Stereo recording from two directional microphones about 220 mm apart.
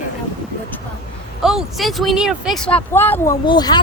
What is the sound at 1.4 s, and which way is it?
Speech, centre (ahead or behind).